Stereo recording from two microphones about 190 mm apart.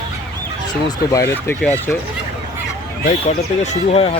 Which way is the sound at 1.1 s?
15° left (ahead or behind).